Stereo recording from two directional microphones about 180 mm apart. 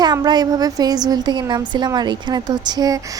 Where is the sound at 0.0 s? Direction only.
20° right (ahead or behind).